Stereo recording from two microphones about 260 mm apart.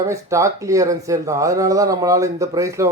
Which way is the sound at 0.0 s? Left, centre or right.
Centre.